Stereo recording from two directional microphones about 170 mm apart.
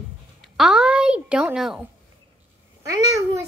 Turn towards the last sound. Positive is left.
turn(degrees=-20)  # may be behind; listen again after turning